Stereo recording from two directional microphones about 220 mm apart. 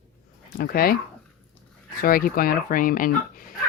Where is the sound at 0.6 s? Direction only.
40° left (ahead or behind).